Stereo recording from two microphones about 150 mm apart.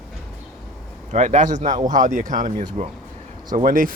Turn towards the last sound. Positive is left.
turn(degrees=-65)  # may be behind; listen again after turning